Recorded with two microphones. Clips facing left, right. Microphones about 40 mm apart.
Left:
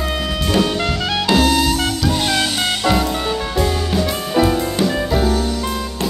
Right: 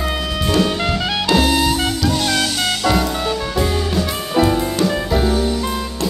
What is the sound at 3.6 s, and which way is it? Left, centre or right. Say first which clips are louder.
Music: left 1 dB; centre.